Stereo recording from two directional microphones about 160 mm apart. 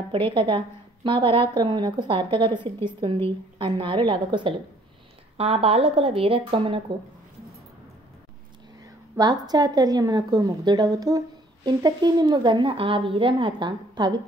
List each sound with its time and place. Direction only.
0.1 s a woman's voice: 30° right (ahead or behind)
8.8 s speech: 25° right (ahead or behind)